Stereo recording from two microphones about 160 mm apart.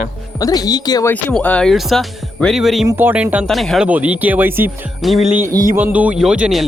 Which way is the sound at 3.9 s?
10° right (ahead or behind).